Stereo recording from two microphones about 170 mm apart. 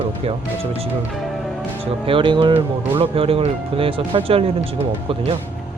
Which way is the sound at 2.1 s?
30° right (ahead or behind).